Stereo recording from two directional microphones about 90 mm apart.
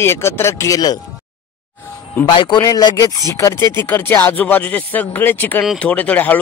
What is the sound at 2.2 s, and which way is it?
Speech, 55° left (ahead or behind).